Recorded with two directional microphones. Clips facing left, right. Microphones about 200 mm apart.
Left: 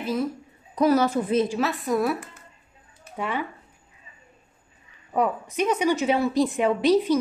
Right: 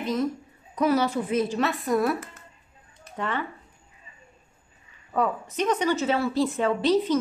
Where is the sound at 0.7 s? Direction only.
40° left (ahead or behind).